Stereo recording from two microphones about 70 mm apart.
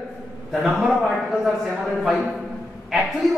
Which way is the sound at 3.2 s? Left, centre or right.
Centre.